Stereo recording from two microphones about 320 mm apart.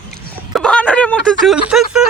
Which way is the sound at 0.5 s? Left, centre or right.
Centre.